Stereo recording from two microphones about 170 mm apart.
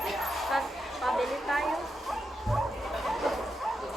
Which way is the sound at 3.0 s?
Centre (ahead or behind).